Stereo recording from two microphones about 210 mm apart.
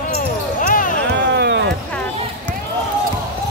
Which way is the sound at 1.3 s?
55° right (ahead or behind).